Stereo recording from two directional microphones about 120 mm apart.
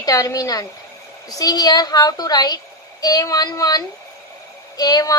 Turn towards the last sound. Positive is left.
turn(degrees=35)  # may be behind; listen again after turning